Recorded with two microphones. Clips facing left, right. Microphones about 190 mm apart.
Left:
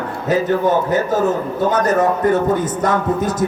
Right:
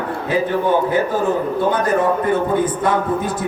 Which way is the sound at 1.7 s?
40° left (ahead or behind).